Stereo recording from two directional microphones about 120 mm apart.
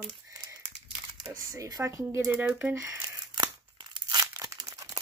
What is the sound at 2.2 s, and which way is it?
Speech, 15° right (ahead or behind).